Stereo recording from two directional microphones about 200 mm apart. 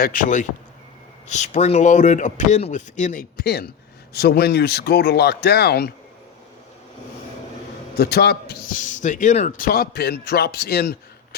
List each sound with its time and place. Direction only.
0.0 s speech: 40° left (ahead or behind)
7.9 s a man's voice: 55° left (ahead or behind)